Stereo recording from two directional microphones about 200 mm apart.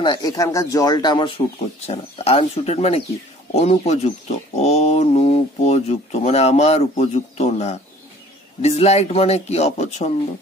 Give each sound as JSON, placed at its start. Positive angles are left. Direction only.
{"t": 0.0, "sound": "speech", "side_deg": 20}